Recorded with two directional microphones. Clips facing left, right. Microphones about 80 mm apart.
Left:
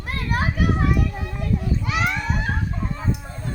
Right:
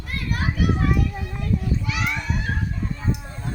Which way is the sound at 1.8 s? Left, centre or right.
Left.